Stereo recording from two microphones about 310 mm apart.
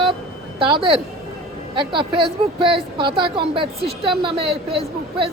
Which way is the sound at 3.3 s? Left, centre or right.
Centre.